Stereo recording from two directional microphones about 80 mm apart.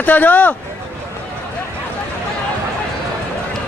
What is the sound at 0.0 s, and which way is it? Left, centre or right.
Speech, left.